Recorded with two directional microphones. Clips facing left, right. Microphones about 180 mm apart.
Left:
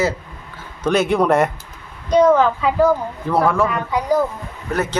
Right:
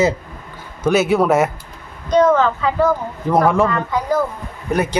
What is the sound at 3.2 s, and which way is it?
Speech, 15° right (ahead or behind).